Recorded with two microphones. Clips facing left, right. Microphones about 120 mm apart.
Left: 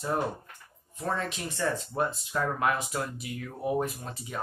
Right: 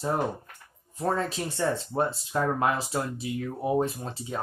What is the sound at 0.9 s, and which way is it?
Speech, 35° right (ahead or behind).